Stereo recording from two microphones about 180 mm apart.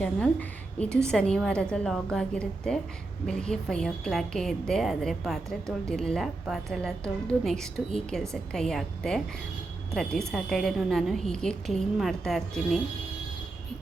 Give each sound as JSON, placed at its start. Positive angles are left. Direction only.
{"t": 0.0, "sound": "a woman's voice", "side_deg": 5}